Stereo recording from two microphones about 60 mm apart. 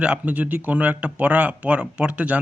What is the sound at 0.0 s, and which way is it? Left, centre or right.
Speech, centre.